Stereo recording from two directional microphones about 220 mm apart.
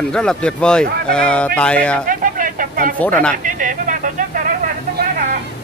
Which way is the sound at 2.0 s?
40° right (ahead or behind).